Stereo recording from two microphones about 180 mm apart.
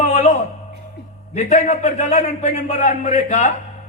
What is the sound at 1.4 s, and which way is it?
A man's voice, 40° left (ahead or behind).